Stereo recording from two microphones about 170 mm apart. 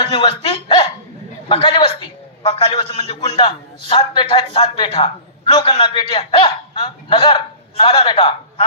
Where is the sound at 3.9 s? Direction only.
30° left (ahead or behind).